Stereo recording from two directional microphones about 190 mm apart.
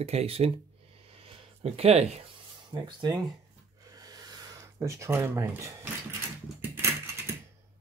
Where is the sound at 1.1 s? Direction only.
30° right (ahead or behind).